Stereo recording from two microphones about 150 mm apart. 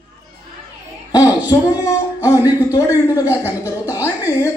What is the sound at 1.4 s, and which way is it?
Music, 25° left (ahead or behind).